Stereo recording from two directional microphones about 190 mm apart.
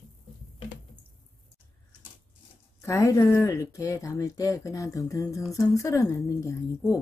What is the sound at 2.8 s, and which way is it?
Speech, 15° left (ahead or behind).